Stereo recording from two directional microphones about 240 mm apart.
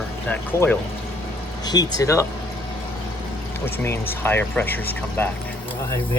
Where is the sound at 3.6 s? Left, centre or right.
Centre.